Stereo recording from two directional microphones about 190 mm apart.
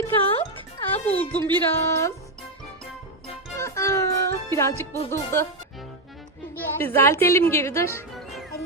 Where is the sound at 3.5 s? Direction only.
15° left (ahead or behind).